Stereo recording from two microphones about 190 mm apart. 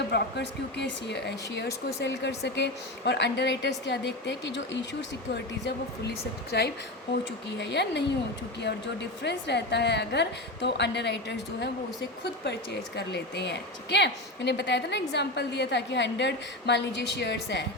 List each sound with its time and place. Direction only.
0.1 s speech: 65° left (ahead or behind)
13.0 s speech: 65° left (ahead or behind)